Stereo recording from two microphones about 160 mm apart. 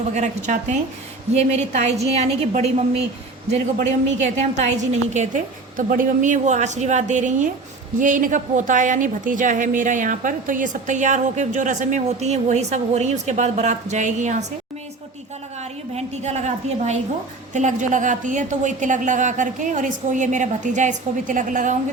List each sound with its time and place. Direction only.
0.1 s a woman's voice: 50° right (ahead or behind)
16.0 s a woman's voice: 45° right (ahead or behind)